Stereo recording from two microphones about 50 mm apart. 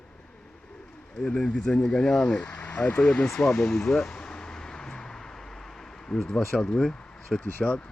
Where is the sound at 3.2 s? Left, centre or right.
Centre.